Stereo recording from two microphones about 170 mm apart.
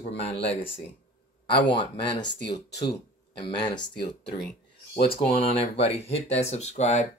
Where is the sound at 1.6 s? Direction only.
30° left (ahead or behind).